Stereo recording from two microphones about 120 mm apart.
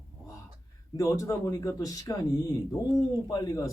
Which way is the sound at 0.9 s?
25° left (ahead or behind).